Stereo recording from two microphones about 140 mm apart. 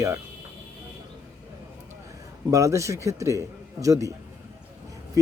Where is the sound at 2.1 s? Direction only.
25° right (ahead or behind).